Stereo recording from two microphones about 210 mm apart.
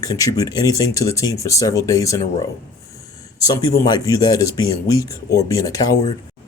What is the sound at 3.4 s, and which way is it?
Speech, 15° left (ahead or behind).